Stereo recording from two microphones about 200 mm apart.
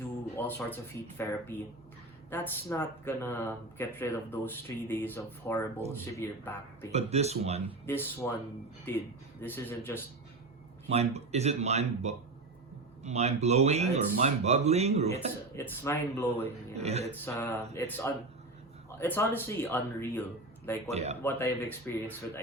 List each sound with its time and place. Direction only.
0.3 s music: 10° left (ahead or behind)
1.2 s speech: 10° left (ahead or behind)
6.9 s speech: 35° right (ahead or behind)
7.9 s speech: 10° left (ahead or behind)
10.8 s speech: 35° right (ahead or behind)
15.5 s speech: 10° left (ahead or behind)
16.2 s speech: 30° right (ahead or behind)
17.2 s speech: 15° left (ahead or behind)
20.9 s speech: 35° right (ahead or behind)
21.2 s speech: 10° left (ahead or behind)